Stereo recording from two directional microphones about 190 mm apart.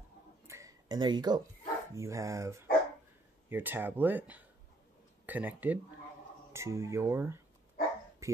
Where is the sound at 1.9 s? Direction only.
15° right (ahead or behind).